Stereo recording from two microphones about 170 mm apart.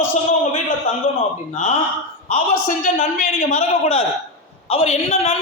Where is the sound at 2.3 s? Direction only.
50° left (ahead or behind).